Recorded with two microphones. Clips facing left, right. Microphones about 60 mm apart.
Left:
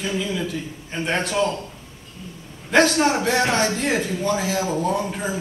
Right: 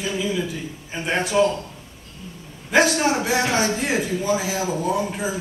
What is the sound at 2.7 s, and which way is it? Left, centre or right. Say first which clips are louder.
A man's voice: left 1 dB; centre.